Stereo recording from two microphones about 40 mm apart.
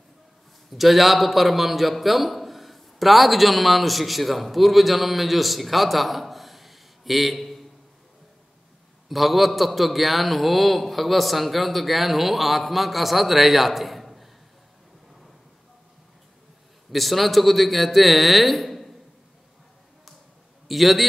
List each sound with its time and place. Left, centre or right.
0.7 s a man's voice: centre
9.1 s a man's voice: centre
16.9 s a man's voice: centre
20.6 s a man's voice: centre